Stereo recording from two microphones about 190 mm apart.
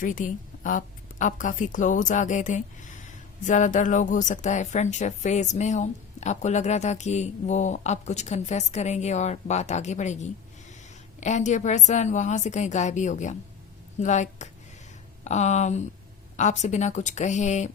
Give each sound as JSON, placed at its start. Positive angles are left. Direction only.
{"t": 0.0, "sound": "a woman's voice", "side_deg": 45}